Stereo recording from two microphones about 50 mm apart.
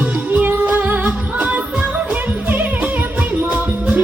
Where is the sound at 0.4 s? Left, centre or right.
Right.